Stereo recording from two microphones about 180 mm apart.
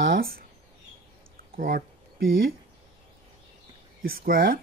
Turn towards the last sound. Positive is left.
turn(degrees=-55)  # may be behind; listen again after turning